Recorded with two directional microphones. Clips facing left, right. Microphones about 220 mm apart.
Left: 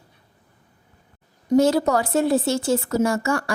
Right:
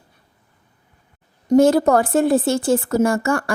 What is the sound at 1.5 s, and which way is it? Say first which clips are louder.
A woman's voice: right 4 dB; 50° right (ahead or behind).